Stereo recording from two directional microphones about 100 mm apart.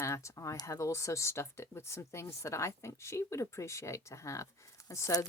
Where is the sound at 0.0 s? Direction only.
30° left (ahead or behind).